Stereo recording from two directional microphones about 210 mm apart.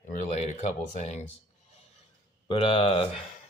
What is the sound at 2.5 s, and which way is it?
Speech, 25° left (ahead or behind).